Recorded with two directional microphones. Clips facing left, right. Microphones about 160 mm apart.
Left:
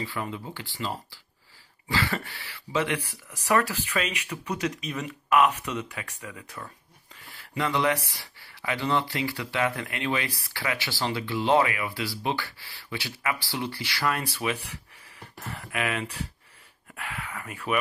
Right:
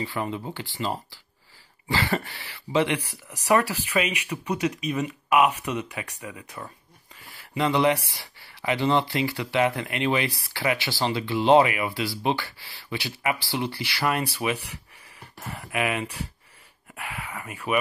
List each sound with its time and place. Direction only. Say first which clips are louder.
0.0 s speech: right 4 dB; 30° right (ahead or behind)
1.9 s cough: right 3 dB; 35° right (ahead or behind)
2.8 s speech: right 3 dB; 15° right (ahead or behind)